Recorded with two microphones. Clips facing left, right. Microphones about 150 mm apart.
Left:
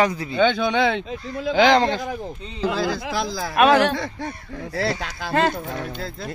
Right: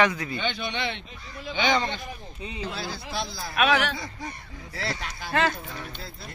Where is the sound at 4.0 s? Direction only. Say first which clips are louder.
Left 7 dB; 75° left (ahead or behind).